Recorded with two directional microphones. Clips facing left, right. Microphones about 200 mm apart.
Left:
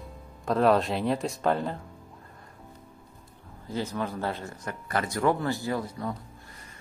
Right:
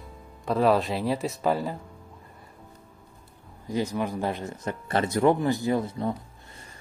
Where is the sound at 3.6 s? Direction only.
15° right (ahead or behind).